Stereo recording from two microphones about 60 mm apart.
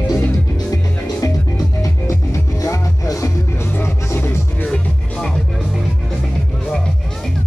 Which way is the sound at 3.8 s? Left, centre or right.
Left.